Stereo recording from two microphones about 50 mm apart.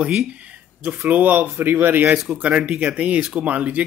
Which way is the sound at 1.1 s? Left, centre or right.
Right.